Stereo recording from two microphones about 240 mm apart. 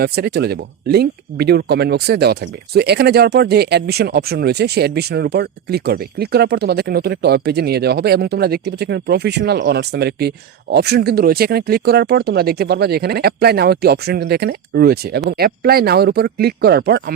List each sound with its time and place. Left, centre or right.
0.0 s speech: right